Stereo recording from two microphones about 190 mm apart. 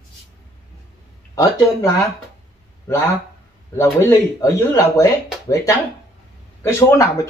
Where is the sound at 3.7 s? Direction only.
15° left (ahead or behind).